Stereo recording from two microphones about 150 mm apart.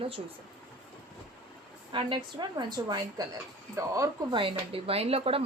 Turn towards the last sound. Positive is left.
turn(degrees=-40)  # may be behind; listen again after turning